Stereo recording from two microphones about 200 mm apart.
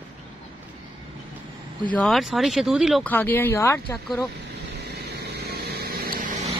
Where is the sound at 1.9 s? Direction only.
Centre (ahead or behind).